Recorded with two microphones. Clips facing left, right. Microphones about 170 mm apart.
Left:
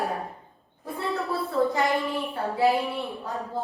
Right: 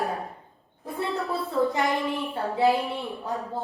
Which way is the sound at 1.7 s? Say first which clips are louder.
Left 1 dB; 20° right (ahead or behind).